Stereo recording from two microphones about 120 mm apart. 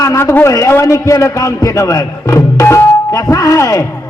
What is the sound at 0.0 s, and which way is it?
A man's voice, 25° left (ahead or behind).